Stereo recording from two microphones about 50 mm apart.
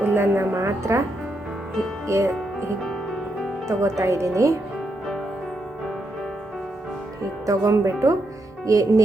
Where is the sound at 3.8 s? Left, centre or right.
Right.